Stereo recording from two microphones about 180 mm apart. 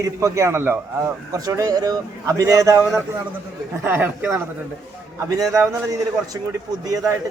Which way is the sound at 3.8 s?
10° right (ahead or behind).